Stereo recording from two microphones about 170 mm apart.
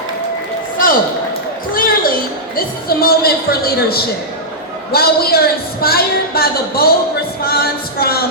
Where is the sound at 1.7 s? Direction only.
60° left (ahead or behind).